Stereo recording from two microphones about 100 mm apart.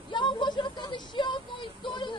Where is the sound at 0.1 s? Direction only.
50° left (ahead or behind).